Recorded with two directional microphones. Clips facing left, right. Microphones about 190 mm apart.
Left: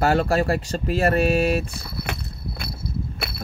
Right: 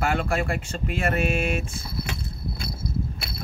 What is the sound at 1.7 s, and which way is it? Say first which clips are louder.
Walk: left 1 dB; 65° left (ahead or behind).